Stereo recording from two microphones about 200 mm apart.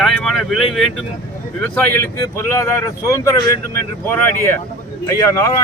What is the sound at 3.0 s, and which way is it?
Speech, 15° left (ahead or behind).